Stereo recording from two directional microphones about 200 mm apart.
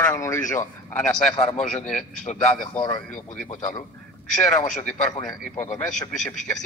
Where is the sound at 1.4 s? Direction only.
30° left (ahead or behind).